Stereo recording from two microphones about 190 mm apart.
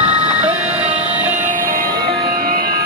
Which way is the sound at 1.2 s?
45° right (ahead or behind).